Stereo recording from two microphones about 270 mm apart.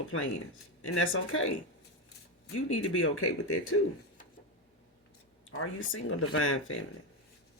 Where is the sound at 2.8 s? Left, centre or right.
Left.